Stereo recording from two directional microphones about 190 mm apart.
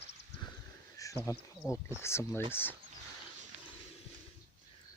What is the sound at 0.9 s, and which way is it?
Bird, 15° left (ahead or behind).